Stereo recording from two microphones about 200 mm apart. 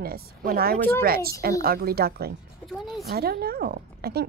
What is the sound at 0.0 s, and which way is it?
Speech, 50° right (ahead or behind).